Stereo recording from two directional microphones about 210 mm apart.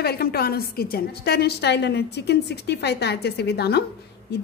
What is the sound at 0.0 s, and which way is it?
A woman's voice, 50° left (ahead or behind).